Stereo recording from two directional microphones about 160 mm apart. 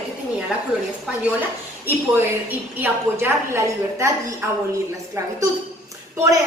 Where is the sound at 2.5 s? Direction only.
10° right (ahead or behind).